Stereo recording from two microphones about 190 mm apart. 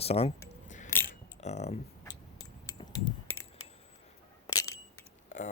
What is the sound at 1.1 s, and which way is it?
Keys jangling, 35° left (ahead or behind).